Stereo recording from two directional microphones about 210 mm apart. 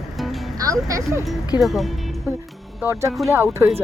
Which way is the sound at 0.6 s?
15° right (ahead or behind).